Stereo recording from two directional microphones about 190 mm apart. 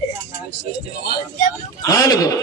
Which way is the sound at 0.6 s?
55° left (ahead or behind).